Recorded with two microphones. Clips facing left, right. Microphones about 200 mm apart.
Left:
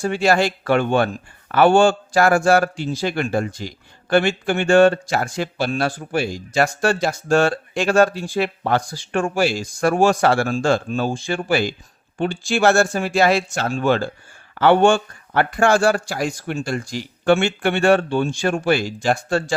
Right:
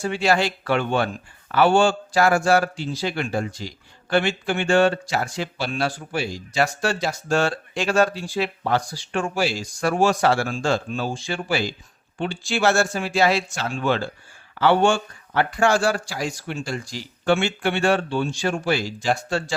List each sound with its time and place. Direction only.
0.0 s speech: 45° left (ahead or behind)